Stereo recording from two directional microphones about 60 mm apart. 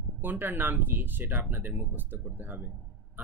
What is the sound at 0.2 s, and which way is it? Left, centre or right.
Speech, right.